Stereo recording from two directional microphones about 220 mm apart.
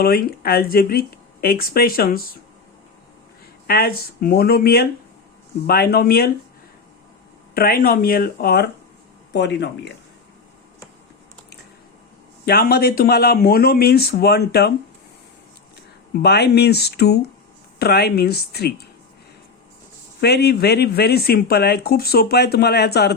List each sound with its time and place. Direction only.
0.0 s speech: 45° left (ahead or behind)
3.7 s speech: 45° left (ahead or behind)
7.5 s speech: 45° left (ahead or behind)
12.5 s speech: 45° left (ahead or behind)
16.1 s speech: 50° left (ahead or behind)
20.2 s speech: 45° left (ahead or behind)